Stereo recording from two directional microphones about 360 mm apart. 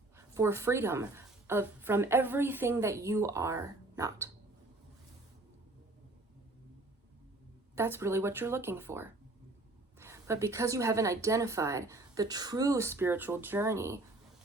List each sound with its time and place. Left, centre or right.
0.2 s a woman's voice: centre
7.8 s a woman's voice: centre